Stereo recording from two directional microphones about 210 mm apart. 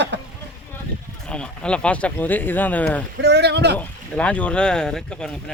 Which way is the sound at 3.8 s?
5° left (ahead or behind).